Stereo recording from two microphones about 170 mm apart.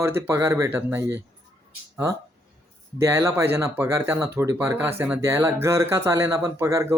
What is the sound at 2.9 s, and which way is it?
Speech, 15° right (ahead or behind).